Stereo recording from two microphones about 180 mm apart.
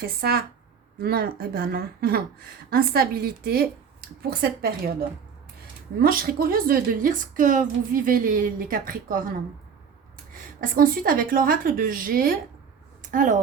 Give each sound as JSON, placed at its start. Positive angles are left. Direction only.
{"t": 0.0, "sound": "a woman's voice", "side_deg": -60}
{"t": 10.6, "sound": "a woman's voice", "side_deg": -50}